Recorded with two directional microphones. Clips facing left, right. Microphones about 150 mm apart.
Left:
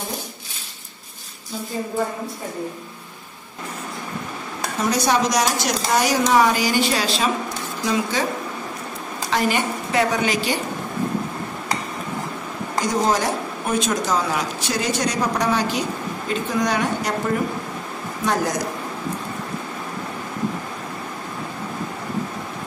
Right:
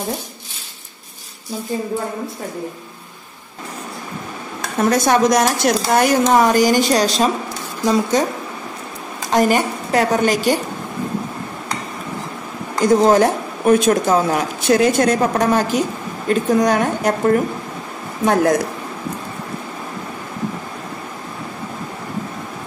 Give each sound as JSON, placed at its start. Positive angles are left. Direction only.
{"t": 4.7, "sound": "a woman's voice", "side_deg": -50}
{"t": 9.3, "sound": "a woman's voice", "side_deg": -45}
{"t": 12.8, "sound": "a woman's voice", "side_deg": -55}
{"t": 18.2, "sound": "a woman's voice", "side_deg": -55}